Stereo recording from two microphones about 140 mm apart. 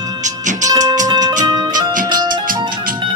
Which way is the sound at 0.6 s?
25° right (ahead or behind).